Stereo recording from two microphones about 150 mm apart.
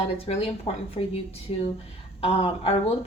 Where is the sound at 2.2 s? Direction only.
40° left (ahead or behind).